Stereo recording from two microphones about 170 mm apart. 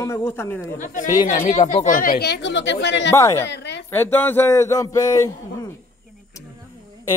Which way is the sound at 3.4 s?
90° left.